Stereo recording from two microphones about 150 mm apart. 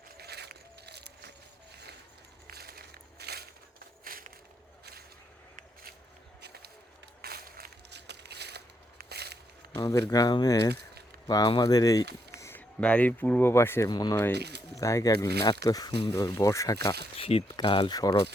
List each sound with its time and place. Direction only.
0.2 s keys jangling: 90° right
2.5 s walk: 90° right
4.0 s crushing: 70° right (ahead or behind)
6.4 s run: 90° right
7.2 s a sound: 90° right
9.7 s speech: 25° left (ahead or behind)
14.3 s speech: 90° right
14.8 s speech: 20° left (ahead or behind)
17.2 s speech: 40° left (ahead or behind)